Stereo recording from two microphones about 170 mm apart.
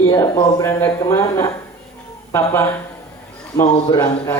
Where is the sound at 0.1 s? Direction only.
15° left (ahead or behind).